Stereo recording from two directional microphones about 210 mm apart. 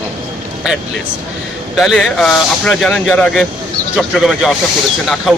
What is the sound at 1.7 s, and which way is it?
Speech, centre (ahead or behind).